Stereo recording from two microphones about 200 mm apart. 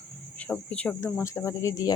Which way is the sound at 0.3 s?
5° left (ahead or behind).